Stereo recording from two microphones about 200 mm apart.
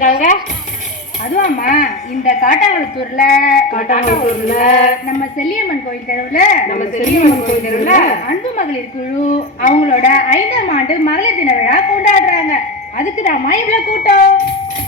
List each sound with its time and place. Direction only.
0.0 s music: 40° left (ahead or behind)
1.4 s a woman's voice: 40° left (ahead or behind)